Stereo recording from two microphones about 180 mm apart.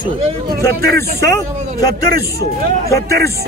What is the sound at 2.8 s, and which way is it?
Speech, 15° left (ahead or behind).